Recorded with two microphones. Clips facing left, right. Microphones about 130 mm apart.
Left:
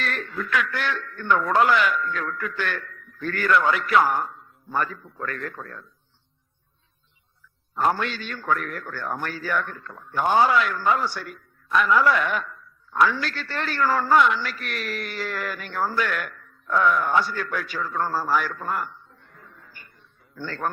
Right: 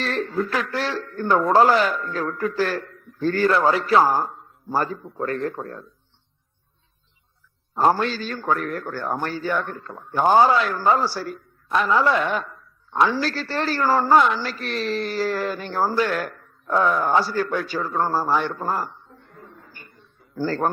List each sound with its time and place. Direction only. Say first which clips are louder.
0.0 s a man's voice: right 6 dB; 30° right (ahead or behind)
7.8 s a man's voice: right 4 dB; 30° right (ahead or behind)
19.2 s a sound: right 5 dB; 50° right (ahead or behind)
20.3 s speech: right 9 dB; 40° right (ahead or behind)